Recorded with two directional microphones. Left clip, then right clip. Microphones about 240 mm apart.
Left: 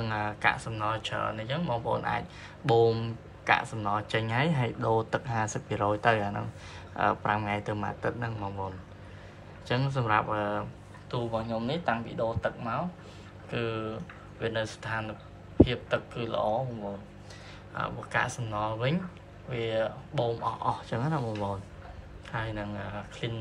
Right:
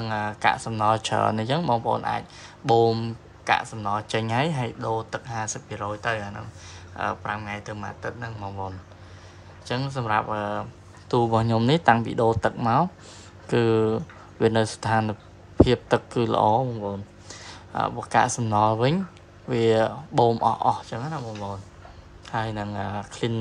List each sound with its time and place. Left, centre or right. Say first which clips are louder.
0.0 s speech: right 4 dB; centre
11.1 s speech: right 10 dB; right; by 21.5 s centre
22.2 s speech: right 6 dB; centre